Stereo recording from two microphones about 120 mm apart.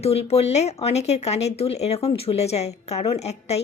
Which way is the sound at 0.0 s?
60° left (ahead or behind).